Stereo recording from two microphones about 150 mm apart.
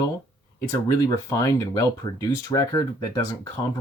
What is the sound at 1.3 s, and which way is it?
Speech, 20° left (ahead or behind).